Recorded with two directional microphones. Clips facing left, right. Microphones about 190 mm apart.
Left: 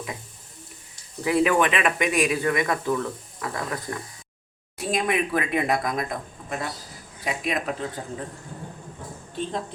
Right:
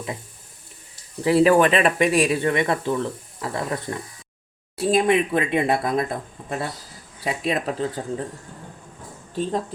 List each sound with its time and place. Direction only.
1.2 s speech: 30° right (ahead or behind)
9.3 s speech: 40° right (ahead or behind)